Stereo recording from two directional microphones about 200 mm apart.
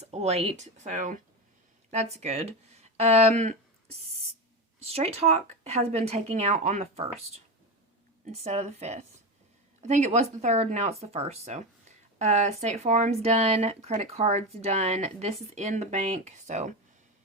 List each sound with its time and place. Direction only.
0.0 s speech: 30° right (ahead or behind)